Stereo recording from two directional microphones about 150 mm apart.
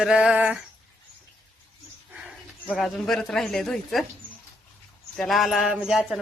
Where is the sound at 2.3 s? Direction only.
Centre (ahead or behind).